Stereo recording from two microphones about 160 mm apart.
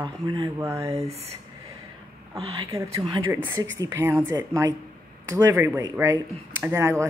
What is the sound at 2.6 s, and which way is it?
A woman's voice, 20° right (ahead or behind).